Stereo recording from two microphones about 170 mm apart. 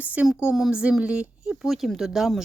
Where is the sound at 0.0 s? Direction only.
10° right (ahead or behind).